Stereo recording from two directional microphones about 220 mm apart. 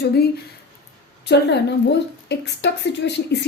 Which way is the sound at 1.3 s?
50° left (ahead or behind).